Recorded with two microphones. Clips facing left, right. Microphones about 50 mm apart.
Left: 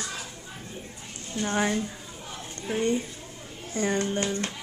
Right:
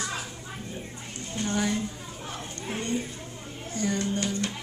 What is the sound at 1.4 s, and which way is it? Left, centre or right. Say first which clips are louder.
Speech: left 2 dB; left.